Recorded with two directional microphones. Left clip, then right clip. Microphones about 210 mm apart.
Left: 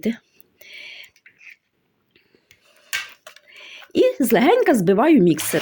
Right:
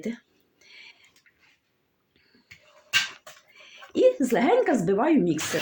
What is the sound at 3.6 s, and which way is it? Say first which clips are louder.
Speech: left 4 dB; 55° left (ahead or behind).